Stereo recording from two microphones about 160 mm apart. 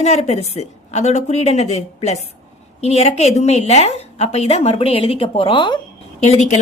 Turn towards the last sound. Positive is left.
turn(degrees=45)  # may be behind; listen again after turning